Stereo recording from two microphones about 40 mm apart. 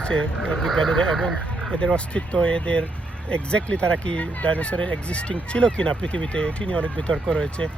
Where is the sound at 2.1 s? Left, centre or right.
Left.